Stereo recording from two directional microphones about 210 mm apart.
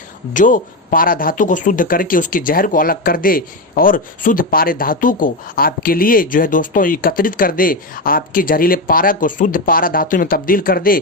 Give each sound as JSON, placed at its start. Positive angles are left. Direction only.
{"t": 0.3, "sound": "speech", "side_deg": 40}